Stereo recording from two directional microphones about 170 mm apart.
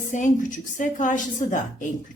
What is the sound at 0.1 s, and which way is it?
Speech, 50° left (ahead or behind).